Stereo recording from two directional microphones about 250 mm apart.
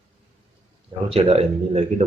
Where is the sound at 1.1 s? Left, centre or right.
Right.